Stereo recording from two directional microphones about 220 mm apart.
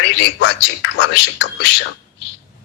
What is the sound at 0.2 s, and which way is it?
A man's voice, 55° left (ahead or behind).